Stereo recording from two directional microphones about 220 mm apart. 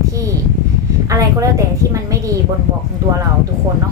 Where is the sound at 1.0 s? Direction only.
15° right (ahead or behind).